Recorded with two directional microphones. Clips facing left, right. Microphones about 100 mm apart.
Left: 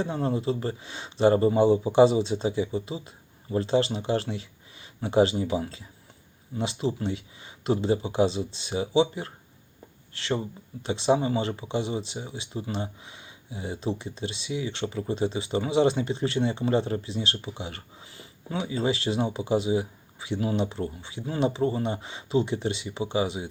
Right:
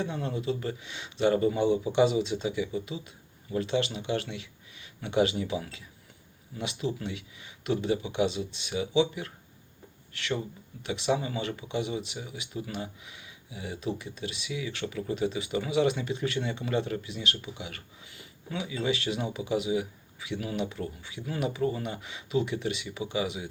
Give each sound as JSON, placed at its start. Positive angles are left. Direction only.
{"t": 0.0, "sound": "speech", "side_deg": 35}